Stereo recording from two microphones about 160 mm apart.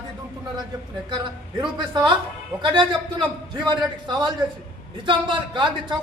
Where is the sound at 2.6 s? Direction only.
30° right (ahead or behind).